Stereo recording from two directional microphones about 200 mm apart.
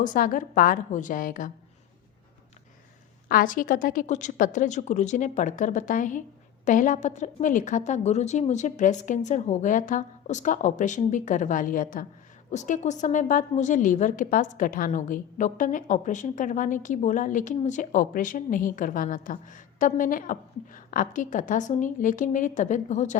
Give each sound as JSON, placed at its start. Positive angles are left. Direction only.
{"t": 0.0, "sound": "a woman's voice", "side_deg": 40}
{"t": 3.2, "sound": "a woman's voice", "side_deg": 45}